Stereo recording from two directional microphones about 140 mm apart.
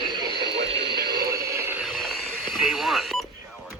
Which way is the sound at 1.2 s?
20° right (ahead or behind).